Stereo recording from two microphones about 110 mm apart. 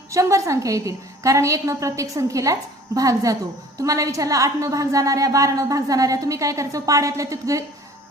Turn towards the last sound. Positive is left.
turn(degrees=-30)  # may be behind; listen again after turning